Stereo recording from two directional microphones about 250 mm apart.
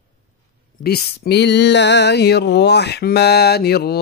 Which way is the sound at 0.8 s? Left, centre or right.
Left.